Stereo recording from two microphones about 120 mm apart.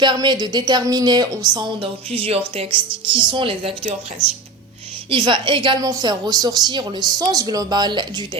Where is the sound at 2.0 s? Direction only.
55° right (ahead or behind).